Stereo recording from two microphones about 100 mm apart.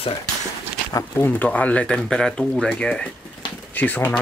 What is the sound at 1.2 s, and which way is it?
Speech, 15° left (ahead or behind).